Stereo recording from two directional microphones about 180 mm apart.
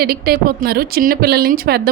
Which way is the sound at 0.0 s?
60° right (ahead or behind).